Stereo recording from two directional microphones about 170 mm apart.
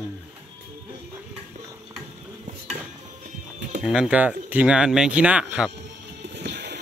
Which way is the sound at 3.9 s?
5° right (ahead or behind).